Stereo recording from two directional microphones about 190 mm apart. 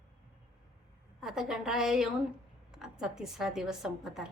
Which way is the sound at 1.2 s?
Centre (ahead or behind).